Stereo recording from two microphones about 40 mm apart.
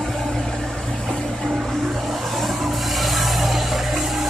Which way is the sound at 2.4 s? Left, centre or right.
Centre.